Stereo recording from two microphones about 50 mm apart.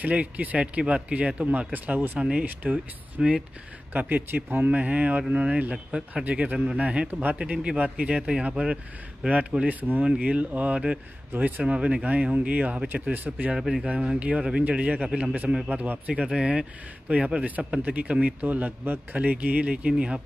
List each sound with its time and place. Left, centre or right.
0.0 s speech: right
2.1 s speech: right
2.4 s speech: right
3.2 s speech: centre
3.9 s speech: right
5.9 s speech: centre
6.2 s speech: right
9.7 s speech: right
13.6 s speech: centre
13.8 s speech: right
15.7 s speech: right